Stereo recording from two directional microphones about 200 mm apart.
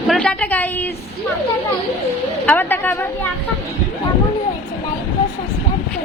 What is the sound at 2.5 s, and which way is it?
Speech, 10° left (ahead or behind).